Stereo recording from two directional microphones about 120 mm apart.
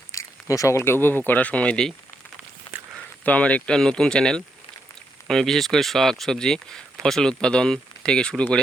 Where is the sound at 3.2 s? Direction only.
10° left (ahead or behind).